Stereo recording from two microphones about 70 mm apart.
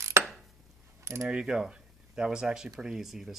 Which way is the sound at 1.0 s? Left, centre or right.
Right.